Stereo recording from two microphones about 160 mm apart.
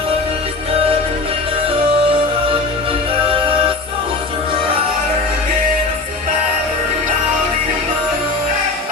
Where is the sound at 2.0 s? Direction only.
35° right (ahead or behind).